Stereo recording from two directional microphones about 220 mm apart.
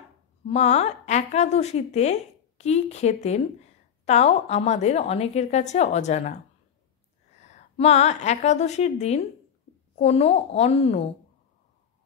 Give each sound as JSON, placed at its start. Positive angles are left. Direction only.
{"t": 0.5, "sound": "a woman's voice", "side_deg": 30}
{"t": 7.4, "sound": "a woman's voice", "side_deg": 30}